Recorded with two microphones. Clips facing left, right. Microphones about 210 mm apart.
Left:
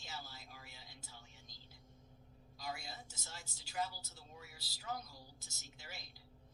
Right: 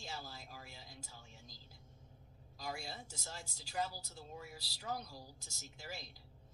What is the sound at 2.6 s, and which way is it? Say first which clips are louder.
A woman's voice: right 2 dB; 35° right (ahead or behind).